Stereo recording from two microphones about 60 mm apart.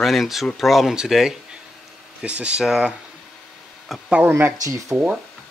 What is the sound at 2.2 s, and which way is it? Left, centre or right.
Speech, centre.